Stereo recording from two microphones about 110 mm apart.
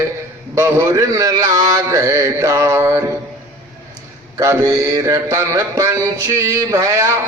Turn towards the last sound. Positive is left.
turn(degrees=-30)  # may be behind; listen again after turning